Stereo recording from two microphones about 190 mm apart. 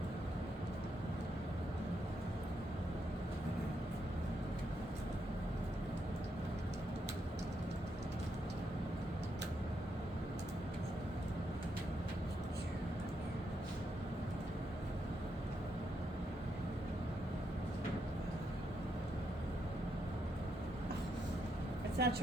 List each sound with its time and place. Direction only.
22.0 s vehicle: 60° right (ahead or behind)